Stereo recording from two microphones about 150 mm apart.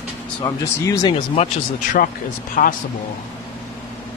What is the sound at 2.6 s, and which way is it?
Speech, 65° left (ahead or behind).